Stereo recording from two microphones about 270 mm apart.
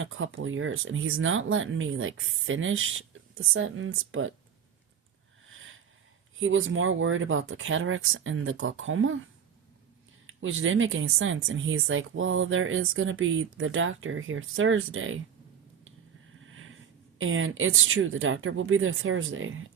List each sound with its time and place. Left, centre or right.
0.0 s speech: right
5.5 s sniff: right
6.4 s speech: right
10.2 s speech: right
16.5 s a sound: right
17.2 s speech: right